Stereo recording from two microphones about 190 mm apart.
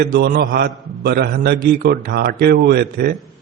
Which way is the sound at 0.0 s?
60° right (ahead or behind).